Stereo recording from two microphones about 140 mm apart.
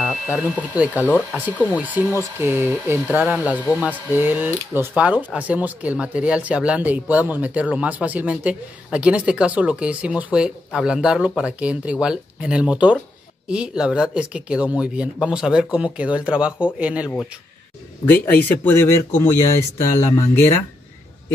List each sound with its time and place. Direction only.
0.0 s speech: centre (ahead or behind)
18.0 s speech: 15° left (ahead or behind)